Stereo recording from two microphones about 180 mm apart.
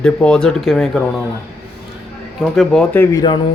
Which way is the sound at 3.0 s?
20° left (ahead or behind).